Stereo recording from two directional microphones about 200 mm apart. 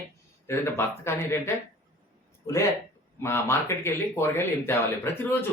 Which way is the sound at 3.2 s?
10° left (ahead or behind).